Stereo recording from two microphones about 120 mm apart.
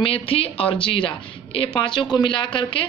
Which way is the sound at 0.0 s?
50° left (ahead or behind).